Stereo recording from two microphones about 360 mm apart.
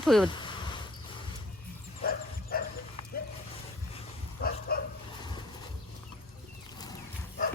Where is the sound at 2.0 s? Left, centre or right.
Left.